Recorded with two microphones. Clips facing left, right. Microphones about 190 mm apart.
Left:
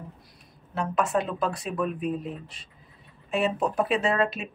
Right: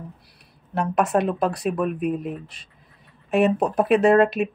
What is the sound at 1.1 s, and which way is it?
Speech, 50° right (ahead or behind).